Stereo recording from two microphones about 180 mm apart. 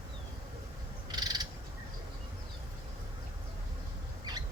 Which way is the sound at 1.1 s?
20° right (ahead or behind).